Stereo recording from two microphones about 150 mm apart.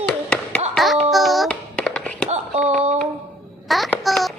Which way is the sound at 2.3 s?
50° right (ahead or behind).